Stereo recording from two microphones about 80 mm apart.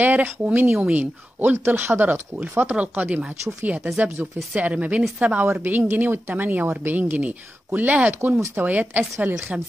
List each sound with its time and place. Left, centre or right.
0.0 s a woman's voice: right
0.7 s speech: centre
1.4 s a woman's voice: right